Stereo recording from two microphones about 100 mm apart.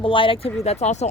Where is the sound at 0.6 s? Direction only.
90° left.